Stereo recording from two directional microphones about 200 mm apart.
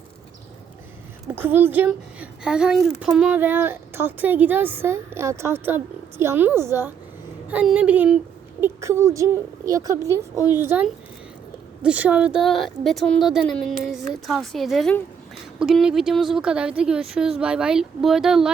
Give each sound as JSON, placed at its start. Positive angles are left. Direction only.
{"t": 1.3, "sound": "speech", "side_deg": -10}
{"t": 10.3, "sound": "a woman's voice", "side_deg": 20}
{"t": 10.6, "sound": "a woman's voice", "side_deg": -10}